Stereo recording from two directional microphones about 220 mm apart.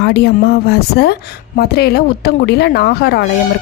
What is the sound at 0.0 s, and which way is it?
A woman's voice, 45° left (ahead or behind).